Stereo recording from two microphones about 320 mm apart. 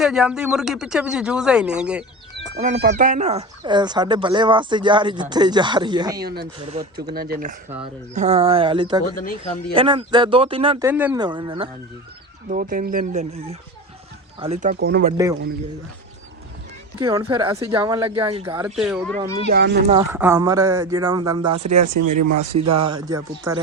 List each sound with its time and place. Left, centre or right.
0.0 s speech: centre
2.6 s speech: right
6.2 s speech: right
6.7 s speech: centre
7.2 s speech: right
12.5 s speech: right
17.0 s speech: centre
18.5 s speech: centre
19.5 s speech: right
20.0 s speech: centre
21.9 s speech: right
23.5 s speech: centre